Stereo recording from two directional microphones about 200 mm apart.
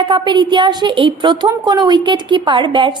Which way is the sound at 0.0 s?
25° right (ahead or behind).